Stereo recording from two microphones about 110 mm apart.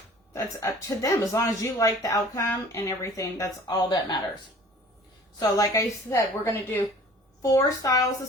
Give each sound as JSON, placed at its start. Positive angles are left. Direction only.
{"t": 0.3, "sound": "speech", "side_deg": 30}
{"t": 3.7, "sound": "speech", "side_deg": 40}
{"t": 5.4, "sound": "a woman's voice", "side_deg": 35}
{"t": 7.4, "sound": "speech", "side_deg": 35}